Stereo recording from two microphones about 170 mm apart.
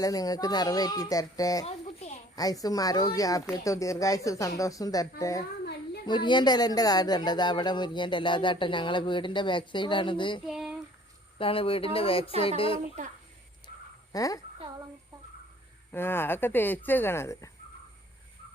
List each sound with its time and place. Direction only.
0.0 s speech: 20° left (ahead or behind)
1.6 s a sound: 40° left (ahead or behind)
2.3 s speech: 20° left (ahead or behind)
10.4 s a sound: 5° right (ahead or behind)
11.3 s speech: 35° left (ahead or behind)
14.1 s speech: 20° left (ahead or behind)
15.9 s speech: 15° left (ahead or behind)